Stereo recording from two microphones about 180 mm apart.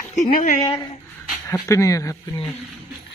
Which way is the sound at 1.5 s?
15° left (ahead or behind).